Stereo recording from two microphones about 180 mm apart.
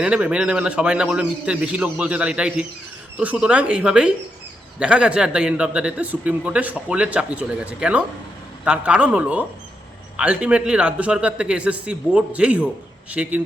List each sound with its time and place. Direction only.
0.0 s a man's voice: 5° right (ahead or behind)